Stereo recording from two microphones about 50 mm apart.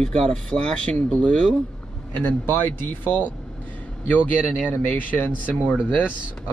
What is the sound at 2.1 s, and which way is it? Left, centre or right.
Speech, left.